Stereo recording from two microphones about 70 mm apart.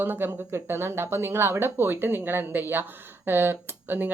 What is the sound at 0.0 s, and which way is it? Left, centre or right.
Speech, right.